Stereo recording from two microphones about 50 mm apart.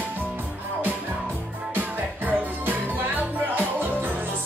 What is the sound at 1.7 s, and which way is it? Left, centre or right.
Music, right.